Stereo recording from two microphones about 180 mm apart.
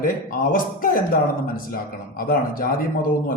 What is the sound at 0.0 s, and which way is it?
A man's voice, 50° left (ahead or behind).